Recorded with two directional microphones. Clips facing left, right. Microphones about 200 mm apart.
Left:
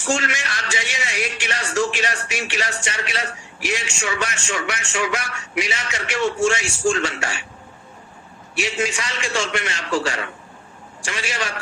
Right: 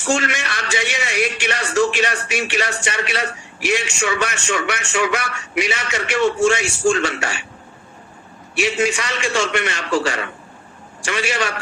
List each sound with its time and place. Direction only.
0.1 s a man's voice: 60° right (ahead or behind)
8.5 s a man's voice: 60° right (ahead or behind)